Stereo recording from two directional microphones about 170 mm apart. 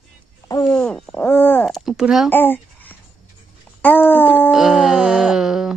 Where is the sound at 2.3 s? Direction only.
10° left (ahead or behind).